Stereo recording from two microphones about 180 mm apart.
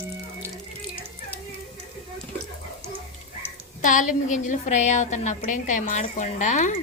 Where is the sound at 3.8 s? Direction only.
45° left (ahead or behind).